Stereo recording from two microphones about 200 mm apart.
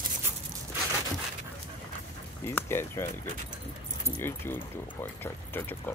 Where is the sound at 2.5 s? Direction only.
10° left (ahead or behind).